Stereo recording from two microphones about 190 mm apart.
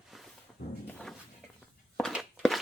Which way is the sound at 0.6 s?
60° left (ahead or behind).